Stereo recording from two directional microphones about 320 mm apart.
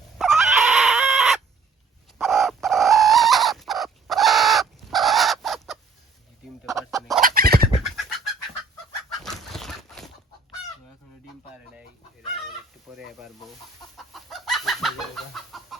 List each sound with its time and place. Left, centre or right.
0.2 s chicken: centre
6.7 s fowl: centre
7.2 s fowl: right
7.8 s bird: centre
9.2 s a sound: centre
13.1 s chicken: centre